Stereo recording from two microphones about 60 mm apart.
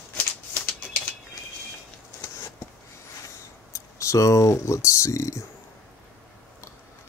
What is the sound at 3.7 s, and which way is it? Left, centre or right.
Speech, left.